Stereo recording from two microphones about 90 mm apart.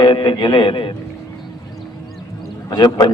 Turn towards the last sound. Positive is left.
turn(degrees=45)  # may be behind; listen again after turning